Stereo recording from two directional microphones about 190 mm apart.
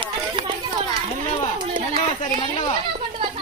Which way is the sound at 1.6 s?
30° right (ahead or behind).